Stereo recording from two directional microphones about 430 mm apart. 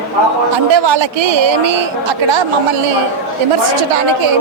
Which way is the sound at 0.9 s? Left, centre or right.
Right.